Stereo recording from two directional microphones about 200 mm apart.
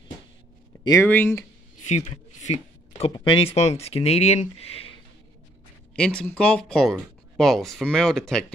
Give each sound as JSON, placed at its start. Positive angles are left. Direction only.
{"t": 0.8, "sound": "speech", "side_deg": 15}
{"t": 1.9, "sound": "speech", "side_deg": 35}
{"t": 5.9, "sound": "speech", "side_deg": 5}